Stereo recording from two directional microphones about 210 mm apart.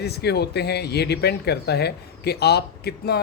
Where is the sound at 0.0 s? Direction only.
50° left (ahead or behind).